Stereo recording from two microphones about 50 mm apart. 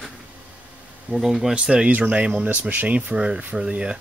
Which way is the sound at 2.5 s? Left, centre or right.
Right.